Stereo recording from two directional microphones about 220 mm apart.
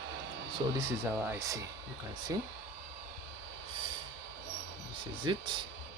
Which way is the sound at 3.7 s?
25° right (ahead or behind).